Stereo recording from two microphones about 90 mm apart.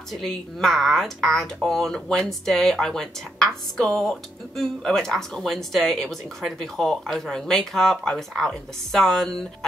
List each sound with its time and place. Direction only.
0.1 s speech: 5° left (ahead or behind)